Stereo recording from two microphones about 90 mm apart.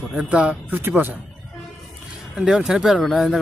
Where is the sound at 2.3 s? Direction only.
10° right (ahead or behind).